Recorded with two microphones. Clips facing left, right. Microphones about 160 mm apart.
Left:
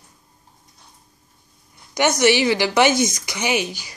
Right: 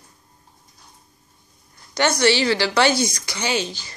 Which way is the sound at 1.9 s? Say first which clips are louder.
Left 2 dB; 15° left (ahead or behind).